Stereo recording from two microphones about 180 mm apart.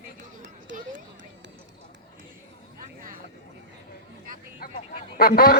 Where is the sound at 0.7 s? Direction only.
80° right.